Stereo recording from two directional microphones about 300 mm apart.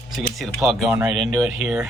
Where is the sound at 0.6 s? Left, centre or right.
Centre.